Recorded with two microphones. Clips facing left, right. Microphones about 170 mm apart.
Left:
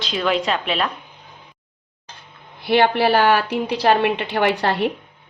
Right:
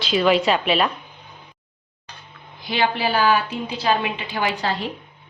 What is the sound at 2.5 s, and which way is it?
A woman's voice, 65° left (ahead or behind).